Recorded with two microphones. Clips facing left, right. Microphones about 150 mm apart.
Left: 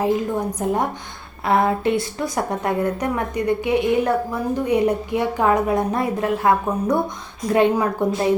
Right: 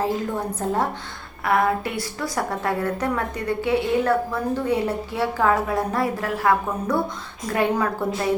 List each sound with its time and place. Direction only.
0.0 s a woman's voice: 15° left (ahead or behind)